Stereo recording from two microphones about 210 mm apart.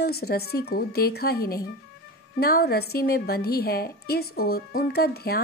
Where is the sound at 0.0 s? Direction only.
50° left (ahead or behind).